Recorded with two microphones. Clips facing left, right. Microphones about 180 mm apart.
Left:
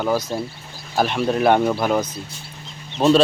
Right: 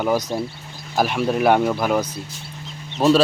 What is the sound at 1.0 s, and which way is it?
Speech, 5° right (ahead or behind).